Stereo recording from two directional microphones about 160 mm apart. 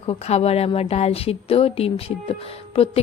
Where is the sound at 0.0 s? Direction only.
40° left (ahead or behind).